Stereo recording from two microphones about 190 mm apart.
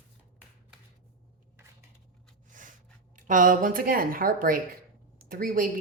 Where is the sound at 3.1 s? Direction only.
45° right (ahead or behind).